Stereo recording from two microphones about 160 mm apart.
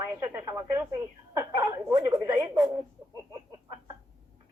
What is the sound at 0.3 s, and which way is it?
Speech, 20° right (ahead or behind).